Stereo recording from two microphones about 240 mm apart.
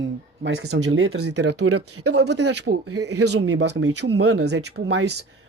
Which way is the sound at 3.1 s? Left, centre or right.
Right.